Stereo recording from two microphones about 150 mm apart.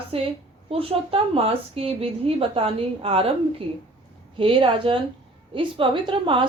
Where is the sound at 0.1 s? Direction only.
40° right (ahead or behind).